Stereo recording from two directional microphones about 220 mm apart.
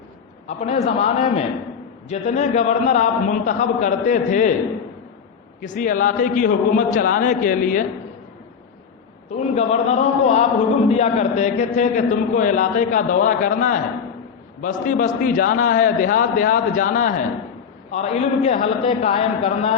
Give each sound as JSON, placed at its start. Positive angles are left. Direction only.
{"t": 0.4, "sound": "a man's voice", "side_deg": 30}
{"t": 5.5, "sound": "a man's voice", "side_deg": 35}
{"t": 9.3, "sound": "a man's voice", "side_deg": 30}